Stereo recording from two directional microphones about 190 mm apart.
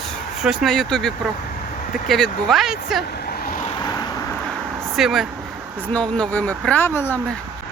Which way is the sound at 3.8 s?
20° left (ahead or behind).